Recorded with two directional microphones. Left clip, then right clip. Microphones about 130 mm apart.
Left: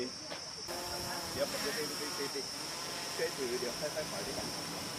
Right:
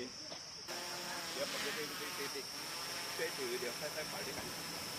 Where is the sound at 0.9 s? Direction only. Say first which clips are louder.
Left 3 dB; 15° right (ahead or behind).